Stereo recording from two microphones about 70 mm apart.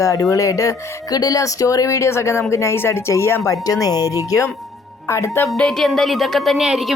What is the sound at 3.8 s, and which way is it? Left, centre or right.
Speech, left.